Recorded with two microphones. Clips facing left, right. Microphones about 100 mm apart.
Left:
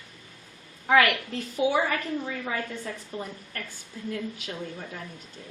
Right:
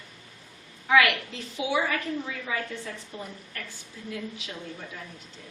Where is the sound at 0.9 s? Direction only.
45° left (ahead or behind).